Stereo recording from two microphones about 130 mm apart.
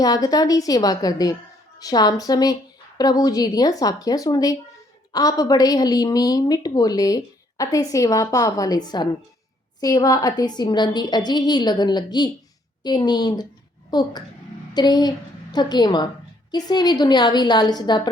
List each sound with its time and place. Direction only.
0.0 s a woman's voice: 30° left (ahead or behind)